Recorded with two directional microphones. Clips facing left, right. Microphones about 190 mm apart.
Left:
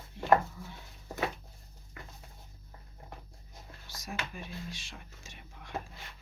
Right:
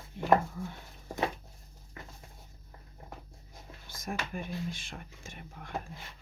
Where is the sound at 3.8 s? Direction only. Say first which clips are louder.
Right 4 dB; 50° right (ahead or behind).